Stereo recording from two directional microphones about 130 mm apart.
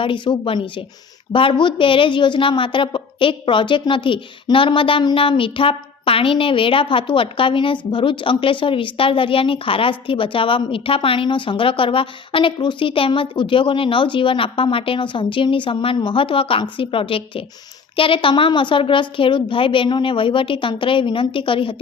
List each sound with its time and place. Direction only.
0.0 s a woman's voice: 40° left (ahead or behind)